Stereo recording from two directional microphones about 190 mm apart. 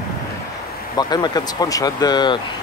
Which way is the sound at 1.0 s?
20° left (ahead or behind).